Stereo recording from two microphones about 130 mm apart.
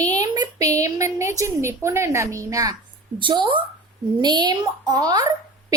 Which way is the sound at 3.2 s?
40° right (ahead or behind).